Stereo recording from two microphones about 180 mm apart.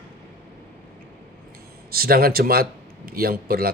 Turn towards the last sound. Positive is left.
turn(degrees=-55)  # may be behind; listen again after turning